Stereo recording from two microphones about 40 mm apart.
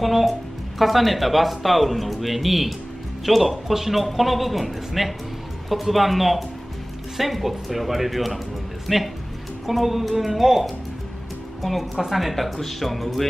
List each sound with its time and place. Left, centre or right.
0.0 s speech: centre